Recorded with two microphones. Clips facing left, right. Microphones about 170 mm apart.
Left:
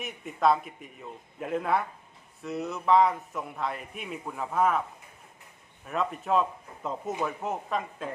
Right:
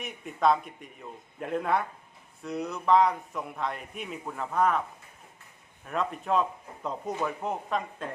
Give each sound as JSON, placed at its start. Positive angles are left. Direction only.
{"t": 0.0, "sound": "a man's voice", "side_deg": 0}
{"t": 5.8, "sound": "a man's voice", "side_deg": 0}